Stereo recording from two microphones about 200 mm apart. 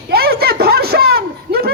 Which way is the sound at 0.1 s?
50° right (ahead or behind).